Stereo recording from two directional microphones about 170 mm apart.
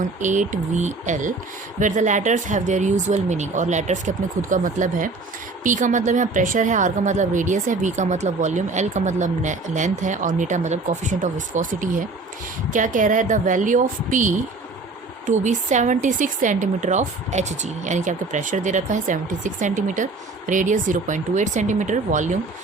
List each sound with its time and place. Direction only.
0.2 s speech: 45° right (ahead or behind)